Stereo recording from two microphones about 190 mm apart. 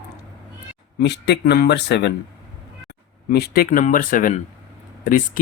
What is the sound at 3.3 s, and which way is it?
Speech, 55° left (ahead or behind).